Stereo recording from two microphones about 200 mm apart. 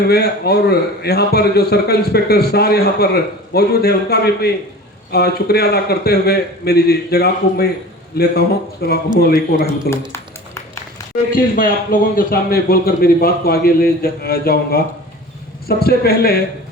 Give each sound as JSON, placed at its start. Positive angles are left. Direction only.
{"t": 0.1, "sound": "a man's voice", "side_deg": 50}
{"t": 9.9, "sound": "a sound", "side_deg": 15}
{"t": 11.3, "sound": "a man's voice", "side_deg": 45}